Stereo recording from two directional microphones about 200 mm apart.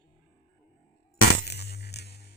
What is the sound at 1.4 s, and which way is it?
Music, 55° left (ahead or behind).